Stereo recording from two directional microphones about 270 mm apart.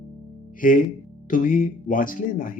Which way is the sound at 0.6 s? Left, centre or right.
Left.